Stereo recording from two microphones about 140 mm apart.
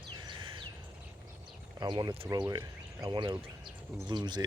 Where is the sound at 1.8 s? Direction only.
30° right (ahead or behind).